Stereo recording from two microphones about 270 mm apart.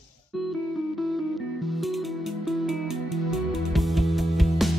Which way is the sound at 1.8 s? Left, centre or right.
Centre.